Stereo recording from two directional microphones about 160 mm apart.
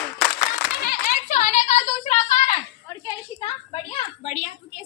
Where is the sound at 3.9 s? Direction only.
45° left (ahead or behind).